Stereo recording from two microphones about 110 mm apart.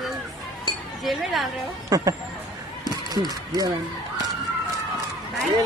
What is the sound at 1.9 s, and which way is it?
Speech, 30° right (ahead or behind).